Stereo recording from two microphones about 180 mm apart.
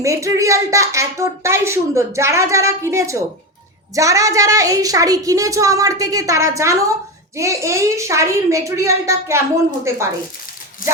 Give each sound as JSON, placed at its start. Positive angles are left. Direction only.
{"t": 0.0, "sound": "a woman's voice", "side_deg": -15}